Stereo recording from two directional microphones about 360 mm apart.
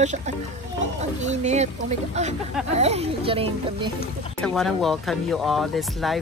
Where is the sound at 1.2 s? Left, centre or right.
Centre.